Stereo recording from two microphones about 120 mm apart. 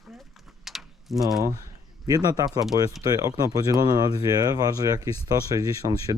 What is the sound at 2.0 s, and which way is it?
Speech, 30° right (ahead or behind).